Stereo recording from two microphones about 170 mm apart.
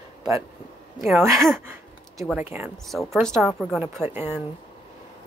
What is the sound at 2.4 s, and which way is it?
Speech, 10° right (ahead or behind).